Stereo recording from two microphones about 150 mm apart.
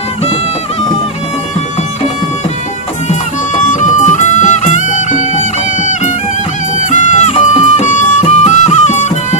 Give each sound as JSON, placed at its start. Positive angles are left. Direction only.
{"t": 3.6, "sound": "music", "side_deg": 55}
{"t": 6.9, "sound": "music", "side_deg": 55}